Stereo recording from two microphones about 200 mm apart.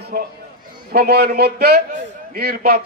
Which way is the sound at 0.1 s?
45° right (ahead or behind).